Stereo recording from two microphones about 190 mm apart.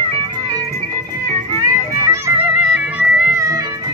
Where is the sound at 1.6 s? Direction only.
15° right (ahead or behind).